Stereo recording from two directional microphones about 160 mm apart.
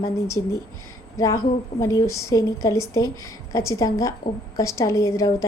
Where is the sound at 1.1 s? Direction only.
20° left (ahead or behind).